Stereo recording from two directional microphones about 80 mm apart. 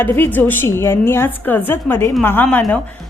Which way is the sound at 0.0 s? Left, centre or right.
Left.